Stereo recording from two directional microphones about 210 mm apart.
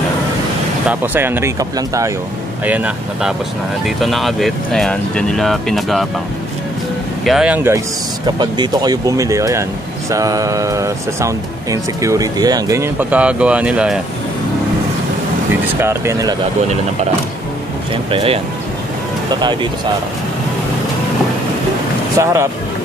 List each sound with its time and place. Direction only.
0.8 s speech: 10° right (ahead or behind)
7.2 s speech: 5° right (ahead or behind)
15.6 s speech: 10° right (ahead or behind)
18.1 s speech: 25° right (ahead or behind)
22.2 s speech: 15° right (ahead or behind)